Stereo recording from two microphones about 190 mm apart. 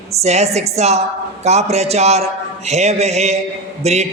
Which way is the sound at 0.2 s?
35° right (ahead or behind).